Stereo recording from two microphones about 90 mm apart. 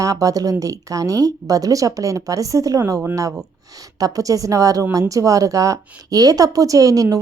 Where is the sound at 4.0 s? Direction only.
40° right (ahead or behind).